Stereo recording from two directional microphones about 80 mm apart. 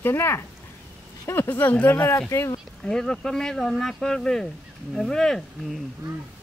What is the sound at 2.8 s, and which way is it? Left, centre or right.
Speech, centre.